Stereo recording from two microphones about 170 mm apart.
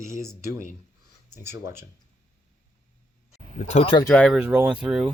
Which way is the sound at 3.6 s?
40° left (ahead or behind).